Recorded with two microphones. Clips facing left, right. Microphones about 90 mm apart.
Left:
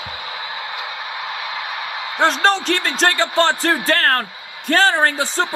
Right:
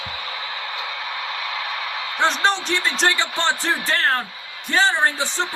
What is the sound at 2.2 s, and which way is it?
A man's voice, 40° left (ahead or behind).